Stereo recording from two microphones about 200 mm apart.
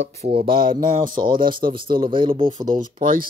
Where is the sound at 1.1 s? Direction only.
25° right (ahead or behind).